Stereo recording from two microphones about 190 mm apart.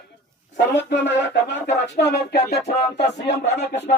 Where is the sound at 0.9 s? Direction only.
65° left (ahead or behind).